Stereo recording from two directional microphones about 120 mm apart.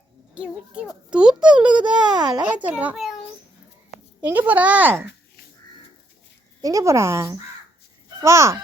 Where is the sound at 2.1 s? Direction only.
35° right (ahead or behind).